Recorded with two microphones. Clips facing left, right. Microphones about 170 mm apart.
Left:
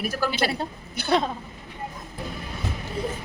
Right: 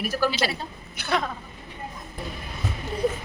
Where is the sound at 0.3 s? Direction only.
55° left (ahead or behind).